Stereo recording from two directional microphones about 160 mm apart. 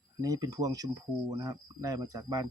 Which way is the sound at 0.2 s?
25° right (ahead or behind).